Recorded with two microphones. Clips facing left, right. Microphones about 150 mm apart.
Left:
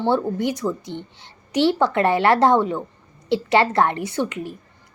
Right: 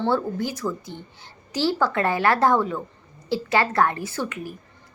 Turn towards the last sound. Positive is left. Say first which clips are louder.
# left 5 dB
turn(degrees=25)  # may be behind; listen again after turning